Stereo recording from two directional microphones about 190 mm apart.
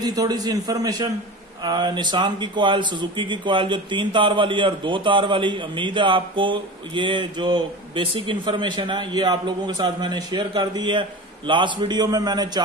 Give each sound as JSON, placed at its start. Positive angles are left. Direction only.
{"t": 0.0, "sound": "a man's voice", "side_deg": -20}